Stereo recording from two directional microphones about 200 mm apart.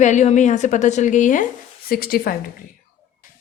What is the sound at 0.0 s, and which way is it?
A woman's voice, 35° left (ahead or behind).